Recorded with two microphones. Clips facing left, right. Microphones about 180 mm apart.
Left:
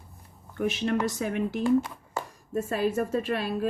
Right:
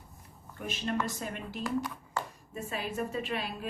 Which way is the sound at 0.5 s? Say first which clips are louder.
Left 7 dB; 80° left.